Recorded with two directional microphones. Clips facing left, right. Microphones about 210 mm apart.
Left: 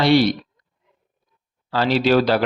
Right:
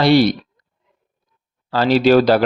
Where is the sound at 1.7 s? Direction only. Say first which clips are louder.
Right 4 dB; 40° right (ahead or behind).